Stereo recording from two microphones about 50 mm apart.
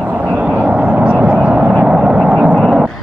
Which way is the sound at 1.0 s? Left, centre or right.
Right.